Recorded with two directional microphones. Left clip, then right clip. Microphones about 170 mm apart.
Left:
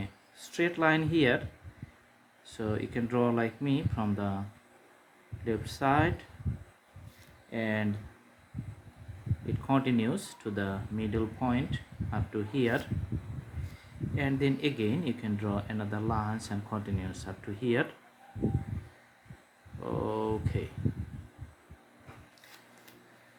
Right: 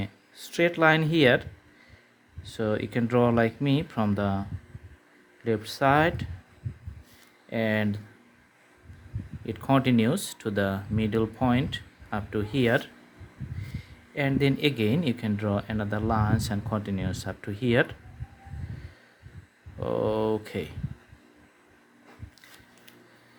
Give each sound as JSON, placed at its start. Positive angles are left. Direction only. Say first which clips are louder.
{"t": 0.0, "sound": "speech", "louder": "right 6 dB", "side_deg": -50}
{"t": 2.4, "sound": "speech", "louder": "right 6 dB", "side_deg": -50}
{"t": 5.5, "sound": "speech", "louder": "right 6 dB", "side_deg": -50}
{"t": 7.5, "sound": "speech", "louder": "right 6 dB", "side_deg": -60}
{"t": 9.5, "sound": "speech", "louder": "right 5 dB", "side_deg": -60}
{"t": 14.2, "sound": "speech", "louder": "right 5 dB", "side_deg": -55}
{"t": 19.8, "sound": "speech", "louder": "right 7 dB", "side_deg": -60}